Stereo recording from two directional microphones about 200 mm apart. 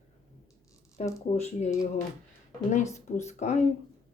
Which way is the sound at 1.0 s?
35° left (ahead or behind).